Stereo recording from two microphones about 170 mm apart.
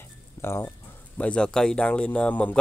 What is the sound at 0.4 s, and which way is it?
Speech, 15° left (ahead or behind).